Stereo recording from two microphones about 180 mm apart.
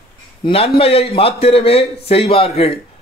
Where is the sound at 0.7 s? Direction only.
30° left (ahead or behind).